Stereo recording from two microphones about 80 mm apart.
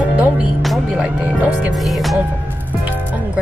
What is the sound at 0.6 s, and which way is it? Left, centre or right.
Speech, centre.